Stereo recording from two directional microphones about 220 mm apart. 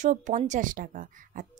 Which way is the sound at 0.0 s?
35° right (ahead or behind).